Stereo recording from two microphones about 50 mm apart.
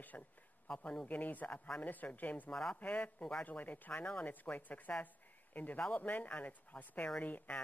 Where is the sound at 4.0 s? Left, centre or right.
Left.